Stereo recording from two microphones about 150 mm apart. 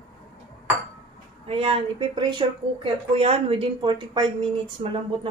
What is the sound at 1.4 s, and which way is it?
A woman's voice, 40° right (ahead or behind).